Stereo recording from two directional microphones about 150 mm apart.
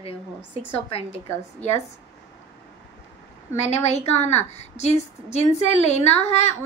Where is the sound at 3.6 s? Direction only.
45° left (ahead or behind).